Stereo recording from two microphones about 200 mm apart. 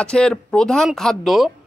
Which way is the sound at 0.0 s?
5° left (ahead or behind).